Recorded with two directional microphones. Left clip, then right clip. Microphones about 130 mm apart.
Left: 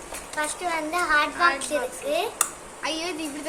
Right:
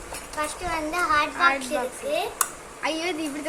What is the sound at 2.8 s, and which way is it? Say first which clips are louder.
Speech: right 2 dB; 35° right (ahead or behind).